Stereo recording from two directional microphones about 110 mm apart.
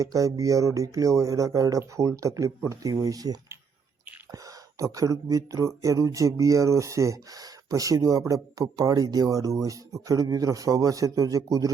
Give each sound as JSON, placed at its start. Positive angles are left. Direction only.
{"t": 0.0, "sound": "speech", "side_deg": -30}
{"t": 4.8, "sound": "speech", "side_deg": -30}